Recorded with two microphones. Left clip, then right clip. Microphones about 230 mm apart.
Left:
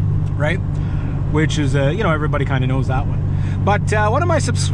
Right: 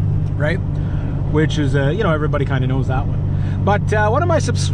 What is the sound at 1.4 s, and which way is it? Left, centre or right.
Speech, left.